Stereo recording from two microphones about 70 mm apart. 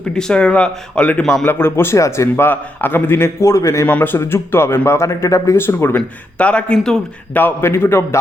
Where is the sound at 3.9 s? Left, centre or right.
Left.